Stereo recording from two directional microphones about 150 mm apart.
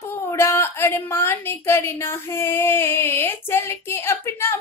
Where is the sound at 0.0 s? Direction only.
20° left (ahead or behind).